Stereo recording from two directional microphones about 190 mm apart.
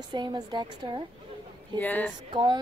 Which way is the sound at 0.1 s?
25° right (ahead or behind).